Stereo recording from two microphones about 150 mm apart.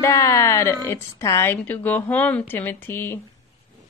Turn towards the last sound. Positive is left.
turn(degrees=15)  # may be behind; listen again after turning